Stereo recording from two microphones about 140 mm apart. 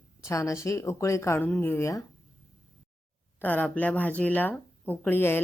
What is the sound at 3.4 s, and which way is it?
Speech, 10° left (ahead or behind).